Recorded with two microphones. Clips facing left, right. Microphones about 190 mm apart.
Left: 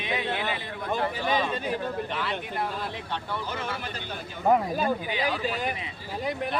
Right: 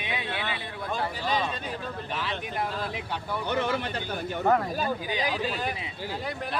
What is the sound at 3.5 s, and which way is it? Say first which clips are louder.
Speech: right 6 dB; 70° right (ahead or behind).